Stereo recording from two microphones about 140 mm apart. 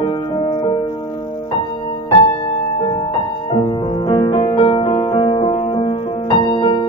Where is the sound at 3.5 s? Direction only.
35° left (ahead or behind).